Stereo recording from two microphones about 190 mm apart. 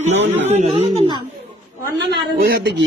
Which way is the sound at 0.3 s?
35° right (ahead or behind).